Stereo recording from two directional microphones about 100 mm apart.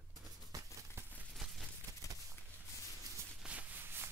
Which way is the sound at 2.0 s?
30° left (ahead or behind).